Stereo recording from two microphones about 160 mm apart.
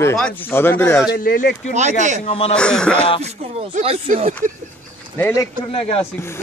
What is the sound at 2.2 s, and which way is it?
Speech, 40° left (ahead or behind).